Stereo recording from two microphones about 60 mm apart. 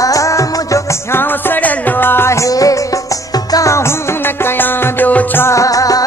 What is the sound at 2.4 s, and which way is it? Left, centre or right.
Music, left.